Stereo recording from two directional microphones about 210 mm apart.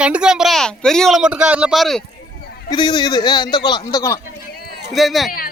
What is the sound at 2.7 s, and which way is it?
Speech, 20° left (ahead or behind).